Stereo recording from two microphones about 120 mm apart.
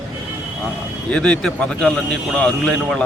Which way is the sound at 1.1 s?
5° left (ahead or behind).